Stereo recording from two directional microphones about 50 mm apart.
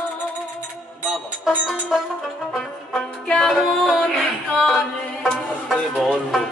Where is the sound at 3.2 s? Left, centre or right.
Left.